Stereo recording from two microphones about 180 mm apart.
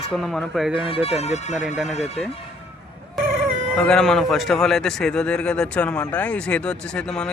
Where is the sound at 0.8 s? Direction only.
30° left (ahead or behind).